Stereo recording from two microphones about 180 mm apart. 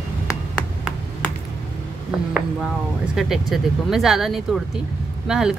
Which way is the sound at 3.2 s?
Centre (ahead or behind).